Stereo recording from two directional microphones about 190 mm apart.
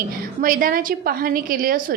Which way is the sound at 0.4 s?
45° right (ahead or behind).